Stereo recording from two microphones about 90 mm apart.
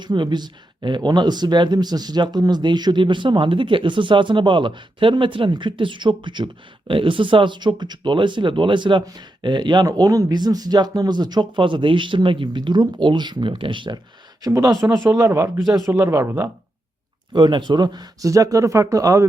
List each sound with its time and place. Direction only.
0.0 s speech: 55° right (ahead or behind)
9.8 s speech: 40° right (ahead or behind); by 14.0 s 60° right (ahead or behind)
14.4 s speech: 40° right (ahead or behind)
17.3 s speech: 55° right (ahead or behind); by 19.3 s 35° right (ahead or behind)